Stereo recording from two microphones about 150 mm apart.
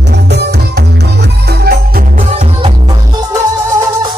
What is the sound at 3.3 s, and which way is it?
Music, 25° right (ahead or behind).